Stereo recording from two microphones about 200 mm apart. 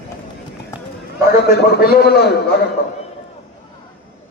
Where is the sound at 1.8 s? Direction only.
50° left (ahead or behind).